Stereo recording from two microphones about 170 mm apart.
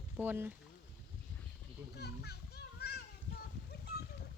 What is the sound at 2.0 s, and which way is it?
Children playing, 70° left (ahead or behind).